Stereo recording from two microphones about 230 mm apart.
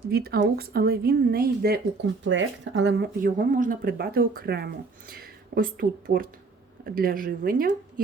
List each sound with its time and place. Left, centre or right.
0.1 s speech: right
2.2 s speech: right